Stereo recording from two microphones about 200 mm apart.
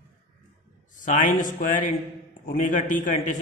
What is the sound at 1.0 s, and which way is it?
A man's voice, 40° left (ahead or behind).